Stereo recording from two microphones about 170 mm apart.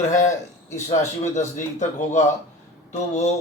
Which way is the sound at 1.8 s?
45° left (ahead or behind).